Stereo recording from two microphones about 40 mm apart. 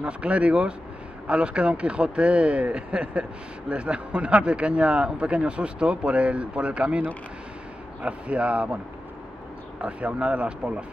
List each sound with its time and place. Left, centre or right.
0.0 s speech: right
9.8 s speech: right